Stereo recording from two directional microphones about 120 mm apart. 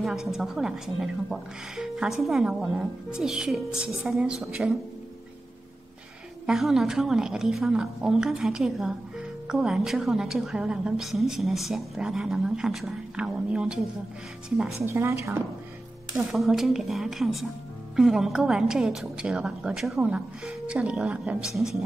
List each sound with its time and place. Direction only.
0.0 s a woman's voice: 5° right (ahead or behind)
6.4 s a woman's voice: 5° right (ahead or behind)
14.9 s a woman's voice: 25° right (ahead or behind)
16.2 s a woman's voice: 5° right (ahead or behind)